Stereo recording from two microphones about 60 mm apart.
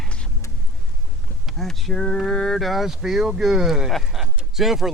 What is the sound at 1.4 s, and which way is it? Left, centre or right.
Speech, centre.